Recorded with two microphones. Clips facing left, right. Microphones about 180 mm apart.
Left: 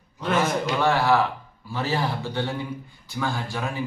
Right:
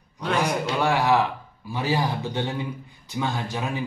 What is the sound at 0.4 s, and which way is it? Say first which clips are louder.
A man's voice: left 1 dB; 15° right (ahead or behind).